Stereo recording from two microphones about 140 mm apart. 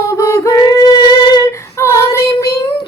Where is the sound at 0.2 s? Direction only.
20° left (ahead or behind).